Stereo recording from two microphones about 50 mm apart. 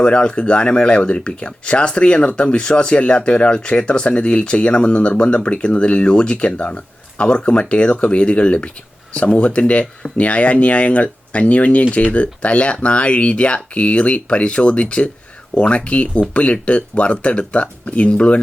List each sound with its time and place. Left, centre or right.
0.0 s speech: centre